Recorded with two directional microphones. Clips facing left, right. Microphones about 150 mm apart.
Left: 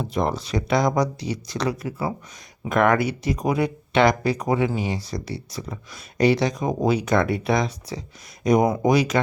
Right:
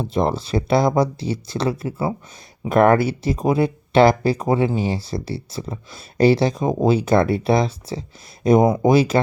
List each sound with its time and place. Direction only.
0.0 s speech: 30° right (ahead or behind)